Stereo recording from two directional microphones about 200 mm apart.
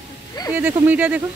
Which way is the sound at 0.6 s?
10° right (ahead or behind).